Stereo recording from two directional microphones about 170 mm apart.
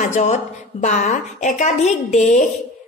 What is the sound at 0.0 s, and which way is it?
A woman's voice, 40° left (ahead or behind).